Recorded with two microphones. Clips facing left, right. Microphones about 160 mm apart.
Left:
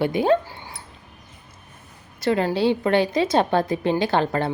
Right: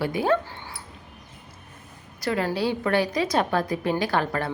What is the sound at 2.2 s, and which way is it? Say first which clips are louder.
A woman's voice: left 5 dB; 25° left (ahead or behind).